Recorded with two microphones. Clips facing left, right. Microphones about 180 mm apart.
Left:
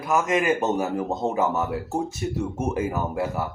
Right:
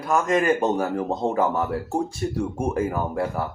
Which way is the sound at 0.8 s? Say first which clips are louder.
Right 1 dB; 25° left (ahead or behind).